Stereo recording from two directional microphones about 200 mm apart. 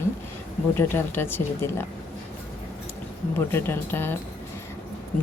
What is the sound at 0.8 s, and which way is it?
A woman's voice, 10° left (ahead or behind).